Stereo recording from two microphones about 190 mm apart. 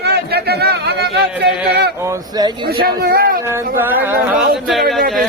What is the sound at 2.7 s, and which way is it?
Speech, 55° right (ahead or behind).